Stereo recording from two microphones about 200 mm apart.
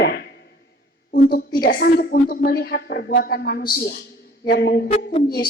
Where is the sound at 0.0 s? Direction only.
55° left (ahead or behind).